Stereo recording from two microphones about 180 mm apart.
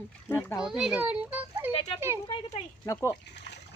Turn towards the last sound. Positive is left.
turn(degrees=15)  # may be behind; listen again after turning